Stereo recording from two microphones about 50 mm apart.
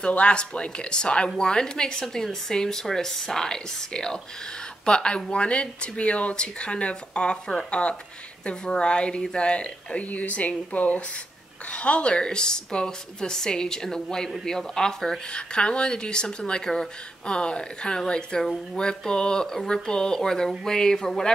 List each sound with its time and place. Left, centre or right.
0.0 s speech: left
2.2 s speech: centre